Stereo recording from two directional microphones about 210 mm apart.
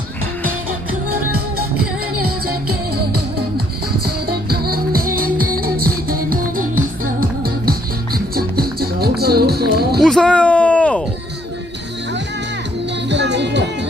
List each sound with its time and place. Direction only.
4.0 s music: 45° right (ahead or behind)
10.0 s a sound: 5° left (ahead or behind)
13.1 s music: 55° right (ahead or behind)